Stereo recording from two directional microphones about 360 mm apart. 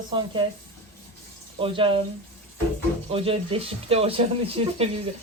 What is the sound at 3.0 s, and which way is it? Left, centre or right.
Speech, centre.